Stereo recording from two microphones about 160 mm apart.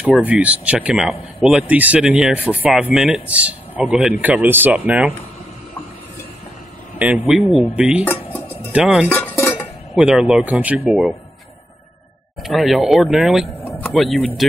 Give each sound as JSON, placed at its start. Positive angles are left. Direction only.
{"t": 0.2, "sound": "speech", "side_deg": -10}
{"t": 7.0, "sound": "speech", "side_deg": -10}
{"t": 8.0, "sound": "music", "side_deg": 15}
{"t": 8.7, "sound": "speech", "side_deg": -5}
{"t": 9.1, "sound": "dishes", "side_deg": 15}
{"t": 9.9, "sound": "speech", "side_deg": -5}
{"t": 12.4, "sound": "speech", "side_deg": 0}